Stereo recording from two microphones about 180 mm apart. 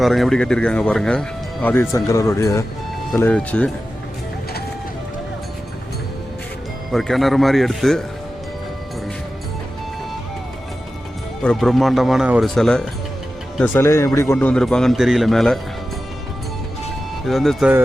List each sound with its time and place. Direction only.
0.0 s speech: centre (ahead or behind)
6.9 s speech: centre (ahead or behind)
11.4 s speech: centre (ahead or behind)
13.6 s speech: 15° left (ahead or behind)
14.3 s speech: 5° left (ahead or behind)
17.2 s speech: centre (ahead or behind)